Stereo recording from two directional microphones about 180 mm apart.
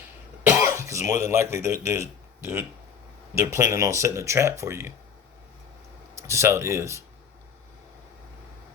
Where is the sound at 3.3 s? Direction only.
15° right (ahead or behind).